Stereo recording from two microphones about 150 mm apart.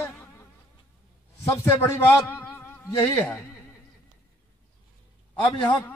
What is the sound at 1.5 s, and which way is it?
Speech, 20° left (ahead or behind).